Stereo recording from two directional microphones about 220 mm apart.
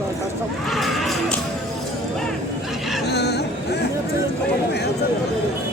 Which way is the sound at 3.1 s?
50° left (ahead or behind).